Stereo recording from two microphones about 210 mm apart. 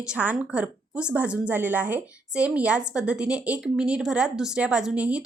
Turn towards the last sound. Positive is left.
turn(degrees=-5)  # may be behind; listen again after turning